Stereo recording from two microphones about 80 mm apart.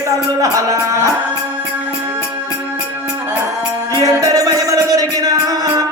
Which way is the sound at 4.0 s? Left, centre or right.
Right.